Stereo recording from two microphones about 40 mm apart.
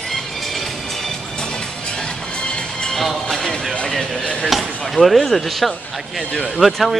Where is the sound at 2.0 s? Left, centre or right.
Left.